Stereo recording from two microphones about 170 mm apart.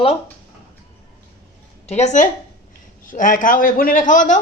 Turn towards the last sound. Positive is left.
turn(degrees=50)  # may be behind; listen again after turning